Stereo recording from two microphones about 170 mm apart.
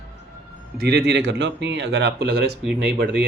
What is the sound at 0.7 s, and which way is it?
Speech, 75° right (ahead or behind).